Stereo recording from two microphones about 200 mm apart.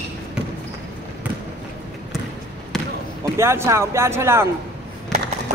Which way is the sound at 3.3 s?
15° right (ahead or behind).